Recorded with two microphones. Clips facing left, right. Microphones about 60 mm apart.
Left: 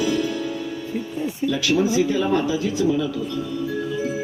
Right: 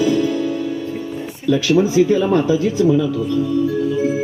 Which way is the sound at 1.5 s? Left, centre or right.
Right.